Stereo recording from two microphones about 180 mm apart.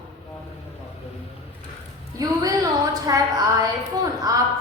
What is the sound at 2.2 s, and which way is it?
A woman's voice, 20° right (ahead or behind).